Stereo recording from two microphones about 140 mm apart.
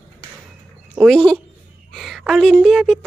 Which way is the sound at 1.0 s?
5° left (ahead or behind).